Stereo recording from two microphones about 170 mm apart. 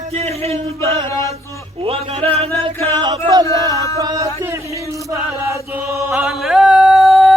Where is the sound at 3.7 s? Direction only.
20° left (ahead or behind).